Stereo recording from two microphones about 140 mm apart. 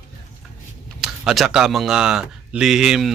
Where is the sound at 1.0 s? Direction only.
5° right (ahead or behind).